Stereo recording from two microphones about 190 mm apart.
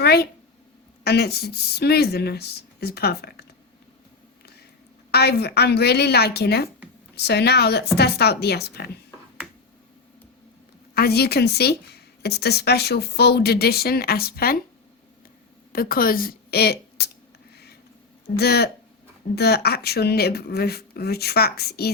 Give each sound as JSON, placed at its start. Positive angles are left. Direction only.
{"t": 0.0, "sound": "a sound", "side_deg": 60}
{"t": 1.0, "sound": "a woman's voice", "side_deg": 55}
{"t": 5.1, "sound": "a woman's voice", "side_deg": 60}
{"t": 10.9, "sound": "a woman's voice", "side_deg": 55}
{"t": 15.7, "sound": "a woman's voice", "side_deg": 50}
{"t": 17.5, "sound": "a sound", "side_deg": 60}
{"t": 18.3, "sound": "a woman's voice", "side_deg": 55}